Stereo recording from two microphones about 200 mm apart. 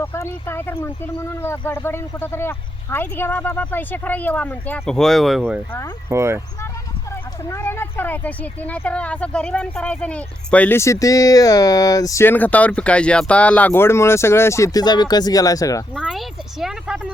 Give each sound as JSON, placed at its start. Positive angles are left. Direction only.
{"t": 0.0, "sound": "speech", "side_deg": 15}
{"t": 7.4, "sound": "speech", "side_deg": 10}
{"t": 16.0, "sound": "speech", "side_deg": 0}